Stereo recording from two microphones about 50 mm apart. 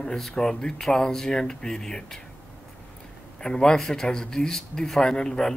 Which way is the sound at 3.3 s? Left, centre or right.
Centre.